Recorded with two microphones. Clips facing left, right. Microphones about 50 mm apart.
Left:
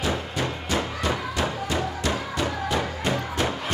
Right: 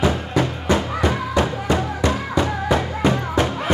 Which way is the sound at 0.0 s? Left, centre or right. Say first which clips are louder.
Right 7 dB; right.